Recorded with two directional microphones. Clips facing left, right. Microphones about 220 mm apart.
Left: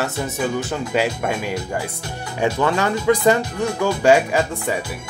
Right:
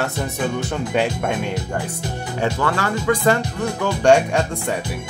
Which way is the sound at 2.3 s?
20° left (ahead or behind).